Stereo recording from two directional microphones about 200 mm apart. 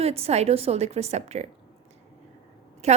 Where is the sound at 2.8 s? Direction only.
35° right (ahead or behind).